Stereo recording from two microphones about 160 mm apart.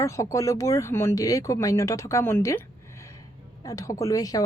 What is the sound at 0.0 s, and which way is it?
A woman's voice, 20° left (ahead or behind).